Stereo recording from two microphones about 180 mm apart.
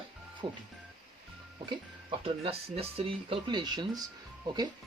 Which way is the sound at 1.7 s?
30° right (ahead or behind).